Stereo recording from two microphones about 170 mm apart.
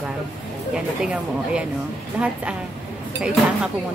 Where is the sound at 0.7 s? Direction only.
5° right (ahead or behind).